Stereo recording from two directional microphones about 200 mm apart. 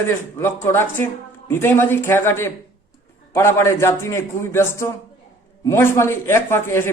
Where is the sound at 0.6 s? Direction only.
10° left (ahead or behind).